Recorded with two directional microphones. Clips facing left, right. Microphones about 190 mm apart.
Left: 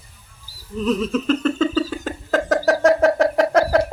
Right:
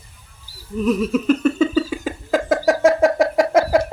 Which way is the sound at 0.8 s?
10° right (ahead or behind).